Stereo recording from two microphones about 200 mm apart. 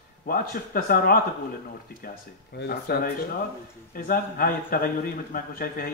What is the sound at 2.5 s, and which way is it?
A man's voice, 55° left (ahead or behind).